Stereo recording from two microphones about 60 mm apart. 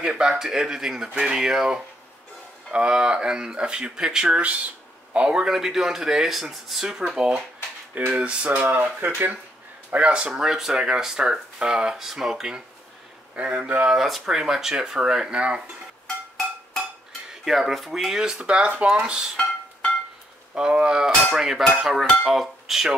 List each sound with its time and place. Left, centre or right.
0.0 s speech: centre
8.5 s speech: right
9.8 s speech: right
13.8 s speech: centre
17.3 s speech: centre
20.5 s speech: centre